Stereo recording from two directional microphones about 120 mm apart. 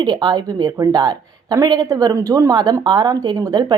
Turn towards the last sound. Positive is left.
turn(degrees=-35)  # may be behind; listen again after turning